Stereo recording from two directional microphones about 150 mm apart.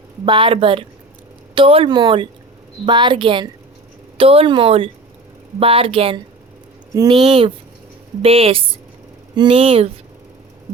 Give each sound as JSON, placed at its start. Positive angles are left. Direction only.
{"t": 0.3, "sound": "speech", "side_deg": -35}